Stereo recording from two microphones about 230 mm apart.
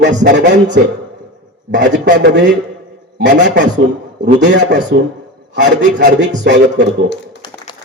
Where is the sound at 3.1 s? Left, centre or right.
Right.